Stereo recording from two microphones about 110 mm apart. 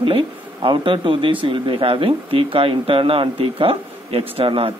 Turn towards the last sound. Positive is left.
turn(degrees=-55)  # may be behind; listen again after turning